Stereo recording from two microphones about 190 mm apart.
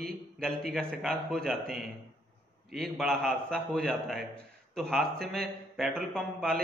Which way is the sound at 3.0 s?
5° left (ahead or behind).